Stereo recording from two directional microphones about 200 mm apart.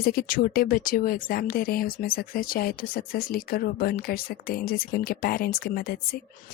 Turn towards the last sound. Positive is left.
turn(degrees=50)  # may be behind; listen again after turning